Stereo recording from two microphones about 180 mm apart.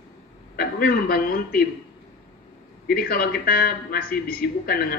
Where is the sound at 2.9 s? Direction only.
55° left (ahead or behind).